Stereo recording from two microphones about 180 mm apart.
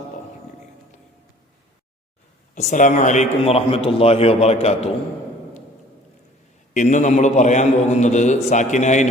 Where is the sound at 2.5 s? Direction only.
40° left (ahead or behind).